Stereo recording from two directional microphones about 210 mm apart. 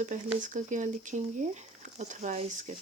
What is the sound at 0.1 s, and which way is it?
Speech, 35° right (ahead or behind).